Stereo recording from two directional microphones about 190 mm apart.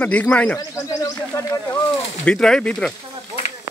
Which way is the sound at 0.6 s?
20° left (ahead or behind).